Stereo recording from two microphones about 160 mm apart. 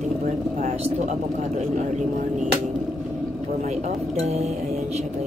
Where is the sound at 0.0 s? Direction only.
45° right (ahead or behind).